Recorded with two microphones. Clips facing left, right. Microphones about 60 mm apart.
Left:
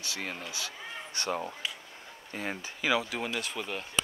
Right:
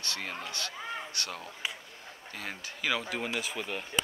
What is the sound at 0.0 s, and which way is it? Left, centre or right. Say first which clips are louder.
Speech: even; centre.